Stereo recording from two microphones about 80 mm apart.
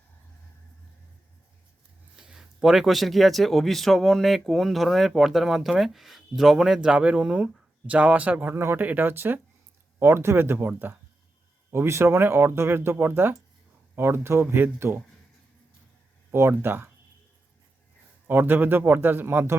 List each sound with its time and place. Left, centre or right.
2.1 s speech: centre; by 15.0 s right
16.3 s speech: right
18.3 s speech: right